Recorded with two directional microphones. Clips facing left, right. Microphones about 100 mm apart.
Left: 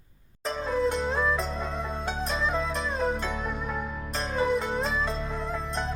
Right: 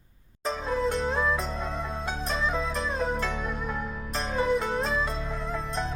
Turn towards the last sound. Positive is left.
turn(degrees=0)  # may be behind; listen again after turning